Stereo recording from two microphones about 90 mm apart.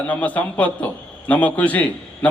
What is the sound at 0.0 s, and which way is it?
A man's voice, 15° left (ahead or behind).